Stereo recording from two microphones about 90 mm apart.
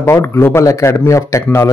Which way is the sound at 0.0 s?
30° left (ahead or behind).